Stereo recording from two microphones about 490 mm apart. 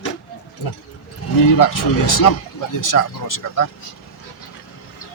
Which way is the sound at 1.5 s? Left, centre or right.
Left.